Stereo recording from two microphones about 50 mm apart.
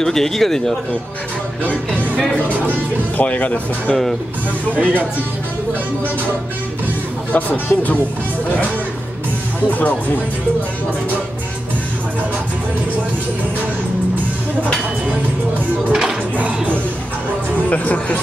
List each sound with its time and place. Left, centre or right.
0.0 s speech: centre
3.2 s speech: left
4.7 s speech: right
7.3 s speech: left
9.7 s speech: left
15.9 s music: centre
16.3 s speech: right
17.6 s speech: left